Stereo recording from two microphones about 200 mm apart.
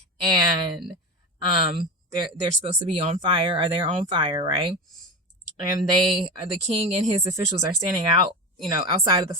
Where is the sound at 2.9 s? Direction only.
25° right (ahead or behind).